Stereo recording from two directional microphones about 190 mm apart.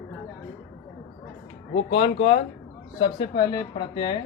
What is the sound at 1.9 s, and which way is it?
Speech, 30° left (ahead or behind).